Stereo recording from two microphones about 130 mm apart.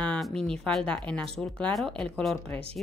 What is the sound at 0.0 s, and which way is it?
Speech, 5° left (ahead or behind).